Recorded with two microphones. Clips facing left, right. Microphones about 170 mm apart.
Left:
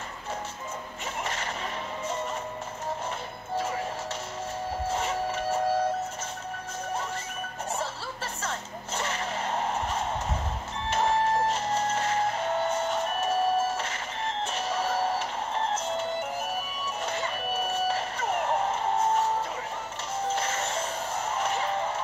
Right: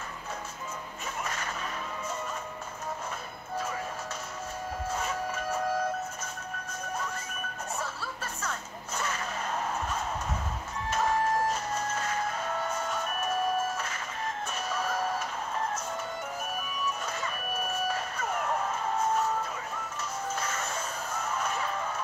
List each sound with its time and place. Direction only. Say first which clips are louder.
3.5 s music: left 4 dB; 30° left (ahead or behind)
4.8 s music: left 4 dB; 30° left (ahead or behind)
7.8 s music: left 3 dB; 30° left (ahead or behind)